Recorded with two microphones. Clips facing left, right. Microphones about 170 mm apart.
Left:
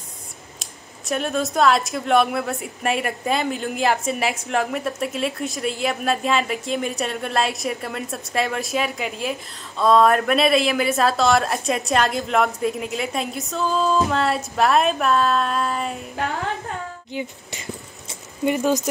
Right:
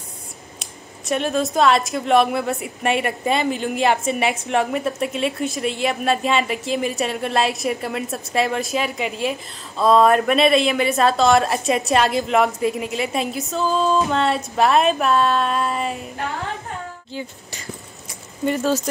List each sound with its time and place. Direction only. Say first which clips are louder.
0.6 s speech: right 3 dB; centre (ahead or behind)
17.1 s speech: left 3 dB; 20° left (ahead or behind)